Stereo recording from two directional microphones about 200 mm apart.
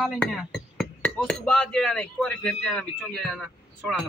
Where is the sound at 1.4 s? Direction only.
5° left (ahead or behind).